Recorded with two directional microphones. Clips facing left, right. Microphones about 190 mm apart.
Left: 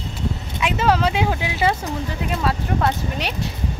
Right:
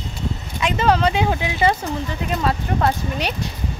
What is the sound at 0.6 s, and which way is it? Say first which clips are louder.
Speech: right 1 dB; 5° left (ahead or behind).